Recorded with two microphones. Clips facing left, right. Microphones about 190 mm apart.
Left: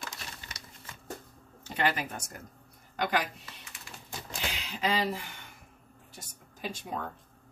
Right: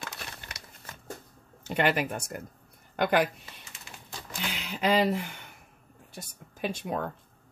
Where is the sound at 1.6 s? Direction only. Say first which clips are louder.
Right 4 dB; 60° right (ahead or behind).